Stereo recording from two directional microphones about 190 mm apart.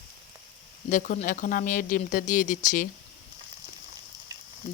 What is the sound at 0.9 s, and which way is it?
Speech, 40° left (ahead or behind).